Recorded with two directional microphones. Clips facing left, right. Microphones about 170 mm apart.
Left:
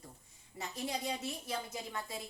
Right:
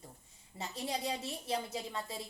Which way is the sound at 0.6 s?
30° right (ahead or behind).